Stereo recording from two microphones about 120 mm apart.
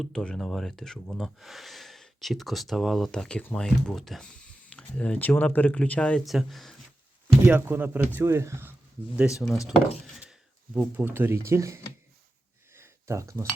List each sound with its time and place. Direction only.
0.0 s speech: 5° left (ahead or behind)
7.4 s speech: 15° right (ahead or behind)
9.1 s speech: 5° right (ahead or behind)
10.9 s speech: 15° right (ahead or behind)
12.7 s cutlery: 20° right (ahead or behind)